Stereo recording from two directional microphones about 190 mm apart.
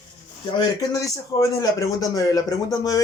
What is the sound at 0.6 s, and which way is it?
A man's voice, 20° left (ahead or behind).